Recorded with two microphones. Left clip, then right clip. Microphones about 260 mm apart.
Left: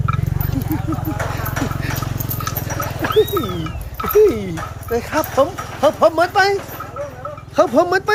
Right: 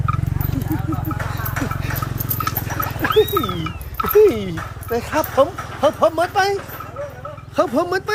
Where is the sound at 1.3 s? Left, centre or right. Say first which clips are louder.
Left 2 dB; left.